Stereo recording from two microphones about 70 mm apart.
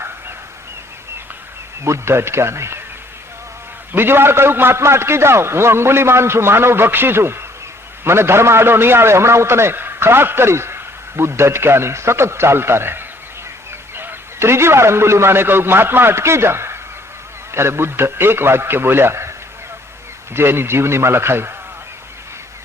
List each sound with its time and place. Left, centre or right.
1.8 s a man's voice: right
3.9 s a man's voice: right
20.3 s a man's voice: right